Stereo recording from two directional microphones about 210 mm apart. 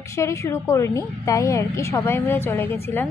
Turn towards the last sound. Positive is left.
turn(degrees=10)  # may be behind; listen again after turning